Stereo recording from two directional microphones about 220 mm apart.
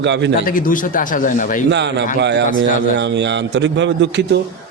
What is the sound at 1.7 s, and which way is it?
A man's voice, 50° right (ahead or behind).